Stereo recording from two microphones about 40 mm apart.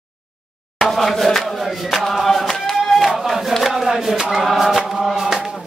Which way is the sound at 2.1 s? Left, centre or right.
Centre.